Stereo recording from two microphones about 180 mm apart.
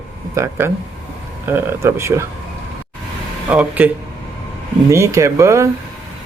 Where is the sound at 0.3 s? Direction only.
15° right (ahead or behind).